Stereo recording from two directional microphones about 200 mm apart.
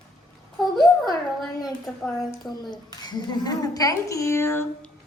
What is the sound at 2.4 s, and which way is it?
A woman's voice, 20° left (ahead or behind).